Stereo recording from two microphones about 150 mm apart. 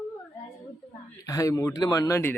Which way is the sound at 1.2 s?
20° left (ahead or behind).